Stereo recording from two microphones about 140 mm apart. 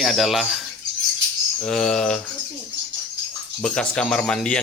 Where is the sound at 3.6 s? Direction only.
5° left (ahead or behind).